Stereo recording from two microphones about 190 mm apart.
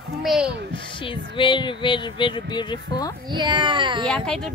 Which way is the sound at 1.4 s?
25° left (ahead or behind).